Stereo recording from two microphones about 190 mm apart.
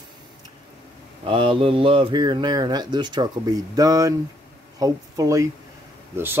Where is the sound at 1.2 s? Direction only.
25° right (ahead or behind).